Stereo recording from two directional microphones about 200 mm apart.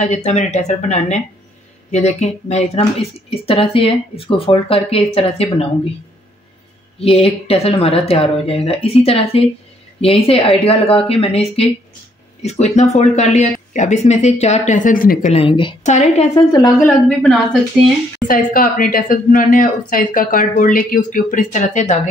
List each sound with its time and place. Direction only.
0.0 s speech: 35° left (ahead or behind)
7.0 s speech: 30° left (ahead or behind)
15.3 s speech: 25° left (ahead or behind)
15.8 s speech: 35° left (ahead or behind)
16.6 s speech: centre (ahead or behind)
18.2 s speech: 45° left (ahead or behind)